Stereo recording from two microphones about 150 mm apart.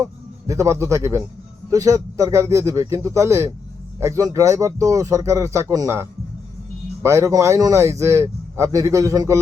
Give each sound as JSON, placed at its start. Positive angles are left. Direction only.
{"t": 0.0, "sound": "a man's voice", "side_deg": -20}